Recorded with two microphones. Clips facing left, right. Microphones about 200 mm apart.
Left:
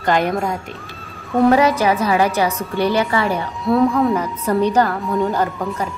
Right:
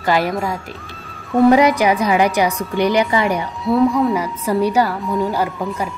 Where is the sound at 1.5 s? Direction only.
15° right (ahead or behind).